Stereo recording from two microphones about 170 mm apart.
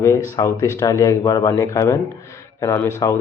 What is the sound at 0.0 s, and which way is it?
Speech, 15° left (ahead or behind).